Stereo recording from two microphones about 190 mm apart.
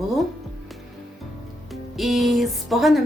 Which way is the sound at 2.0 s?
Centre (ahead or behind).